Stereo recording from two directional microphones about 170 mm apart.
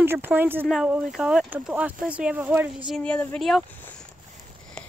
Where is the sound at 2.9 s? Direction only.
5° left (ahead or behind).